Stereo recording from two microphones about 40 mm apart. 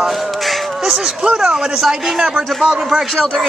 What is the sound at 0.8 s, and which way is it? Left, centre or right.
Speech, centre.